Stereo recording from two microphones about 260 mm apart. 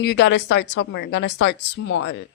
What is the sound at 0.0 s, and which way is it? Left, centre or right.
A woman's voice, left.